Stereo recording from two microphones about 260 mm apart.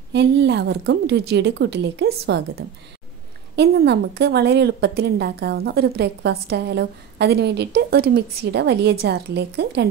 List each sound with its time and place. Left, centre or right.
0.1 s a woman's voice: right
3.5 s a woman's voice: right